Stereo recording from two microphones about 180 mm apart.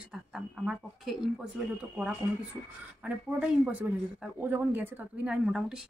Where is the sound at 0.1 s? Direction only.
5° right (ahead or behind).